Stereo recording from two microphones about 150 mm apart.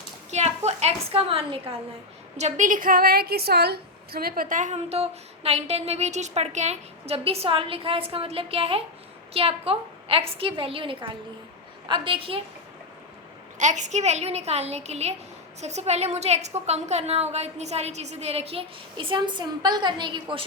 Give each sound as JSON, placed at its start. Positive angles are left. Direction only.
{"t": 0.3, "sound": "a woman's voice", "side_deg": -50}
{"t": 2.4, "sound": "a woman's voice", "side_deg": -60}
{"t": 13.6, "sound": "a woman's voice", "side_deg": -55}